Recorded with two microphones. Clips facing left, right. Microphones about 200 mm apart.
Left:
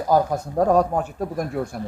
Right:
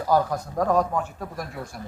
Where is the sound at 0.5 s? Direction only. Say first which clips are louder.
Left 4 dB; 35° left (ahead or behind).